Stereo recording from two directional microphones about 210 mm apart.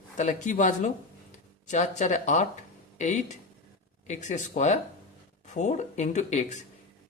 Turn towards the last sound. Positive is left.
turn(degrees=35)  # may be behind; listen again after turning